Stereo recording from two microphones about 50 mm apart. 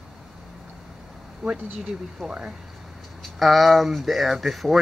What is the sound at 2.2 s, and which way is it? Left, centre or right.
Speech, right.